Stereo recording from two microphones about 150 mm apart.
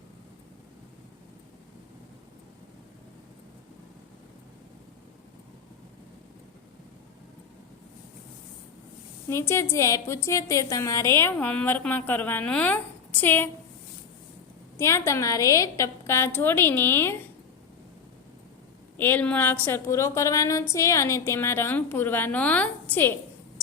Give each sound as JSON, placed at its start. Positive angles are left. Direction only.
{"t": 9.3, "sound": "a woman's voice", "side_deg": 15}
{"t": 14.8, "sound": "a woman's voice", "side_deg": 15}
{"t": 18.9, "sound": "a woman's voice", "side_deg": 10}